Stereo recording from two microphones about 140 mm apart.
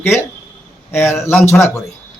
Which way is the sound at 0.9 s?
15° left (ahead or behind).